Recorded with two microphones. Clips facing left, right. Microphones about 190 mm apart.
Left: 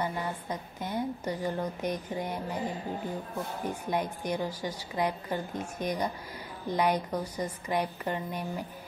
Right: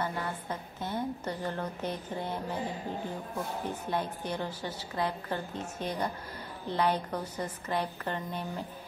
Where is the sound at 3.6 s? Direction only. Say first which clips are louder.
Left 4 dB; 10° left (ahead or behind).